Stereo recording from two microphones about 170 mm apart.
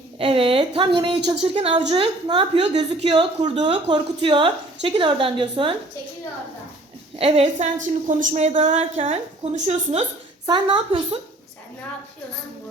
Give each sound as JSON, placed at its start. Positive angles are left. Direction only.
{"t": 0.2, "sound": "a woman's voice", "side_deg": -30}
{"t": 3.4, "sound": "a woman's voice", "side_deg": -40}
{"t": 3.7, "sound": "a woman's voice", "side_deg": -30}
{"t": 7.2, "sound": "a woman's voice", "side_deg": -35}